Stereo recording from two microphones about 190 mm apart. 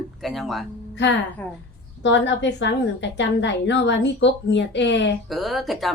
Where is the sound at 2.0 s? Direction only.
70° left (ahead or behind).